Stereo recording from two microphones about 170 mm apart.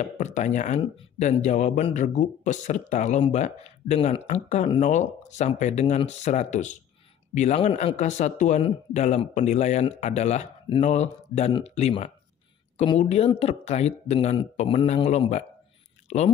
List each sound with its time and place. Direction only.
0.0 s speech: 45° left (ahead or behind)